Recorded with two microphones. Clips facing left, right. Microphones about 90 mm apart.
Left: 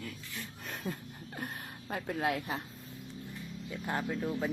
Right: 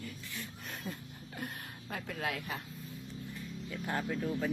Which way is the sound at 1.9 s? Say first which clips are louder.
Left 5 dB; 30° left (ahead or behind).